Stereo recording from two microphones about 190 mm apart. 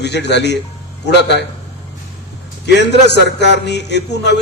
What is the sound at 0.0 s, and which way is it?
A man's voice, 65° left (ahead or behind).